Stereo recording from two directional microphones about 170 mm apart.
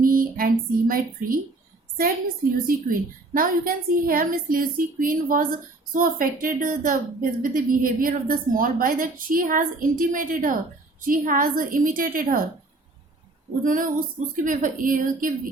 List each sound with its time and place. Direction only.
0.0 s speech: 55° right (ahead or behind)
2.6 s a woman's voice: 55° right (ahead or behind)
13.7 s speech: 50° right (ahead or behind)